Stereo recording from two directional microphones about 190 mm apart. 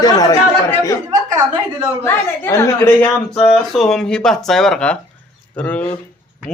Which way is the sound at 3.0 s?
5° left (ahead or behind).